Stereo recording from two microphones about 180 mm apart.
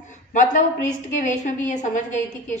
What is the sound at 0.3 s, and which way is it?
A woman's voice, 45° left (ahead or behind).